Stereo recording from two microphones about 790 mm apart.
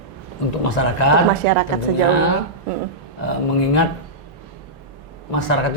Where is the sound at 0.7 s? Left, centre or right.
Left.